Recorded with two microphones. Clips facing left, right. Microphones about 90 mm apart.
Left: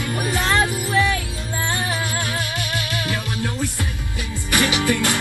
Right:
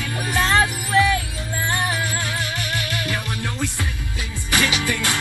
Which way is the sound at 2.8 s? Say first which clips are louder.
Left 1 dB; 20° left (ahead or behind).